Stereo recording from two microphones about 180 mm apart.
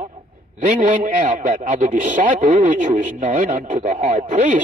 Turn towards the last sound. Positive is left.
turn(degrees=-40)  # may be behind; listen again after turning